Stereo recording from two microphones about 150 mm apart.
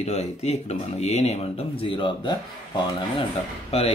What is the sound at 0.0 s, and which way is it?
Speech, 45° left (ahead or behind).